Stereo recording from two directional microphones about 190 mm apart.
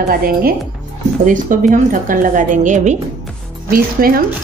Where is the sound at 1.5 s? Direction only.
45° right (ahead or behind).